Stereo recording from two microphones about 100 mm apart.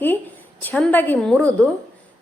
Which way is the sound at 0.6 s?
15° left (ahead or behind).